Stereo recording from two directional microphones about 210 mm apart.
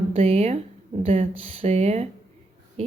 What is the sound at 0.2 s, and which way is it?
Speech, 30° right (ahead or behind).